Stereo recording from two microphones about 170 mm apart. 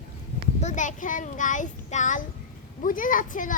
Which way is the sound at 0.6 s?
45° left (ahead or behind).